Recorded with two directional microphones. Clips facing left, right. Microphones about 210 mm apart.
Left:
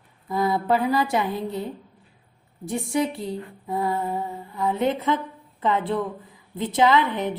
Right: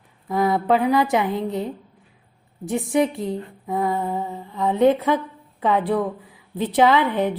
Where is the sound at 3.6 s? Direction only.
20° right (ahead or behind).